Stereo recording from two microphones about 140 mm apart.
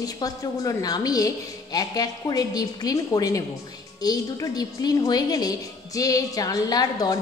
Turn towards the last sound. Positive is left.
turn(degrees=25)  # may be behind; listen again after turning